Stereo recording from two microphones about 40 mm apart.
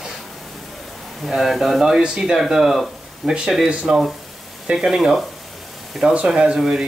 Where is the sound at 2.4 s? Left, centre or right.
Centre.